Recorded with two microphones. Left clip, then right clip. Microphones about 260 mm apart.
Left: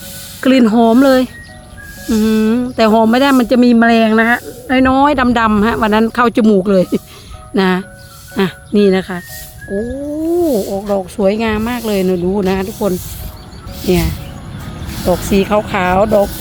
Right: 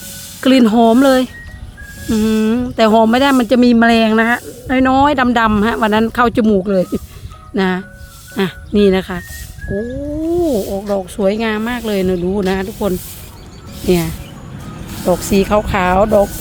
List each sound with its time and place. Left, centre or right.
0.4 s speech: centre
10.4 s speech: centre
15.2 s speech: centre